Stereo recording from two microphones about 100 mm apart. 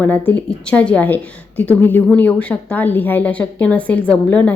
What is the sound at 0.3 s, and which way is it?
A woman's voice, 15° left (ahead or behind).